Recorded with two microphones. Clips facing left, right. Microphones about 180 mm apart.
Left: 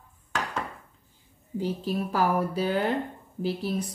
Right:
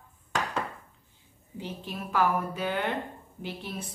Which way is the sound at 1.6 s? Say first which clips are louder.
Left 8 dB; 35° left (ahead or behind).